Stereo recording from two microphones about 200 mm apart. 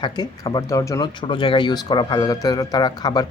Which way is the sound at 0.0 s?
20° left (ahead or behind).